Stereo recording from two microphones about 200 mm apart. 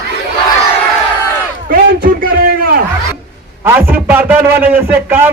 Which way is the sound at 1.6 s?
50° right (ahead or behind).